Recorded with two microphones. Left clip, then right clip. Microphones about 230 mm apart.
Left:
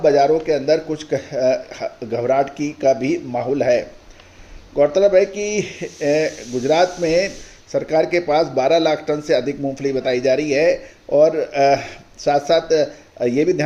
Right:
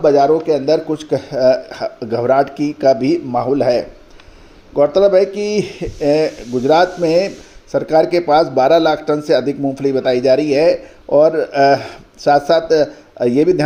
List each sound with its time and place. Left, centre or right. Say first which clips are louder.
0.0 s a man's voice: right 3 dB; right